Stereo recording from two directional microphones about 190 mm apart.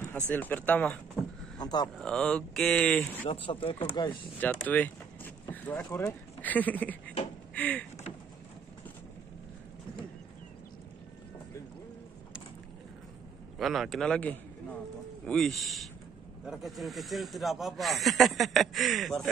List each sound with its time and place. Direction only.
0.3 s speech: 10° left (ahead or behind)
1.6 s a sound: 20° left (ahead or behind)
2.0 s speech: centre (ahead or behind)
3.3 s speech: 30° left (ahead or behind)
4.4 s speech: 5° left (ahead or behind)
7.5 s a sound: 10° left (ahead or behind)
13.6 s speech: centre (ahead or behind)